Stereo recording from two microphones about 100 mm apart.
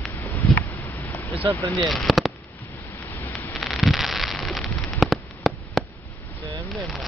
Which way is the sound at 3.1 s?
20° left (ahead or behind).